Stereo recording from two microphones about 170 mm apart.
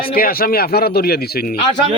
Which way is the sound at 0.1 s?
60° left (ahead or behind).